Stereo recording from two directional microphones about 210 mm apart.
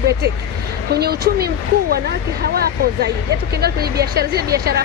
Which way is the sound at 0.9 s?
50° right (ahead or behind).